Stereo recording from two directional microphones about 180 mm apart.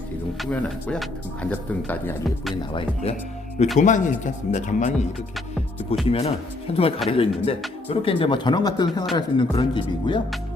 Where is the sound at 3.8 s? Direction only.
45° left (ahead or behind).